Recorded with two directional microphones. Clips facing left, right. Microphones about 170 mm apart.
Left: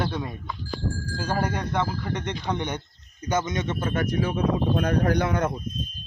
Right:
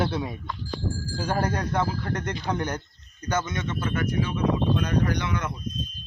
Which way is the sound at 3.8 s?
40° left (ahead or behind).